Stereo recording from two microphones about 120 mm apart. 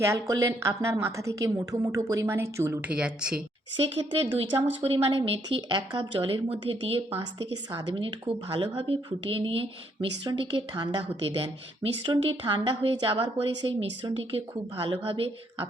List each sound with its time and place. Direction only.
0.0 s a woman's voice: 25° right (ahead or behind)
2.9 s speech: 10° right (ahead or behind)
4.2 s a woman's voice: 55° right (ahead or behind)
10.2 s a woman's voice: 40° right (ahead or behind)
12.0 s a woman's voice: 45° right (ahead or behind)